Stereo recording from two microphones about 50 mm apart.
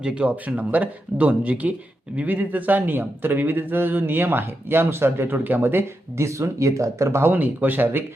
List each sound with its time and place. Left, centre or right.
0.0 s speech: centre
0.3 s speech: right
6.1 s speech: right
7.3 s speech: right